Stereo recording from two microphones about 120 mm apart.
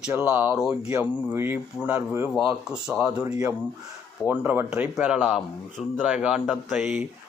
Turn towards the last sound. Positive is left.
turn(degrees=-5)  # may be behind; listen again after turning